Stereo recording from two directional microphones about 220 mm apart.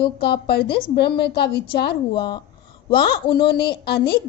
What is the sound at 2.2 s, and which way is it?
Speech, 20° left (ahead or behind).